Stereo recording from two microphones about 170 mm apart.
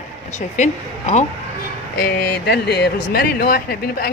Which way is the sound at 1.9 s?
65° left (ahead or behind).